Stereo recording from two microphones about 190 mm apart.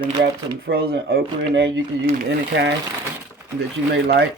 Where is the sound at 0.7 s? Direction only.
60° right (ahead or behind).